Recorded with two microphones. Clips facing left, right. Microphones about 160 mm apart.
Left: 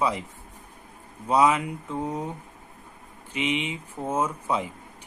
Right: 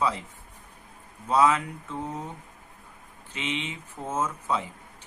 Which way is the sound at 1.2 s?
15° left (ahead or behind).